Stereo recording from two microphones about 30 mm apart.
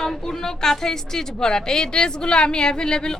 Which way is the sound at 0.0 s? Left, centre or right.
Centre.